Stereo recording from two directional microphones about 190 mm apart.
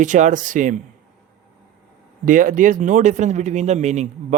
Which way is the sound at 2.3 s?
45° right (ahead or behind).